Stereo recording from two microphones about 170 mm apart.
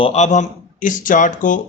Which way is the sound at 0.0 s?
40° left (ahead or behind).